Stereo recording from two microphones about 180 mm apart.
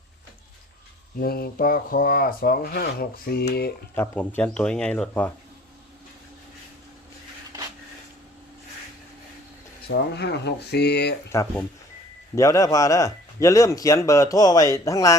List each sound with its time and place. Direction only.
1.2 s speech: 55° left (ahead or behind)
3.9 s a man's voice: 10° left (ahead or behind)
9.8 s speech: 65° left (ahead or behind)
12.3 s a man's voice: 20° left (ahead or behind)